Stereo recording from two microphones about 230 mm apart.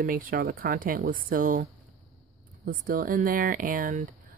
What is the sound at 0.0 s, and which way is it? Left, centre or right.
Speech, right.